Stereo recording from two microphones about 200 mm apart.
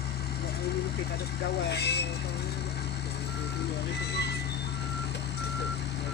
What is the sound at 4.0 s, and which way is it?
Vehicle, 55° left (ahead or behind).